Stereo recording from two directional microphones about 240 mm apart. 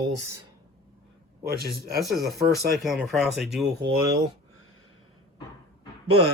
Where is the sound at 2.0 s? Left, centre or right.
Centre.